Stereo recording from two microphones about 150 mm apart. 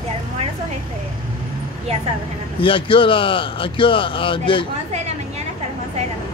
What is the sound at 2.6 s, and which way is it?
Speech, 35° left (ahead or behind).